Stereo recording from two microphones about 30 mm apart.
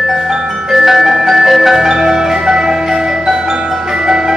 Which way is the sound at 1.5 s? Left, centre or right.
Centre.